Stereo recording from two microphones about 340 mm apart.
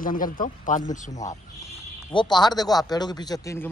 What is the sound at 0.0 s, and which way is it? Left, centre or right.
Speech, left.